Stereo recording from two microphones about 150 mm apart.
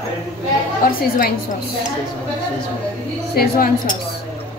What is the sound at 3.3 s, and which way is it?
Speech, 75° left (ahead or behind).